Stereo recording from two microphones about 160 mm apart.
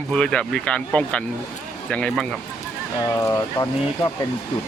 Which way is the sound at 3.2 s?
20° left (ahead or behind).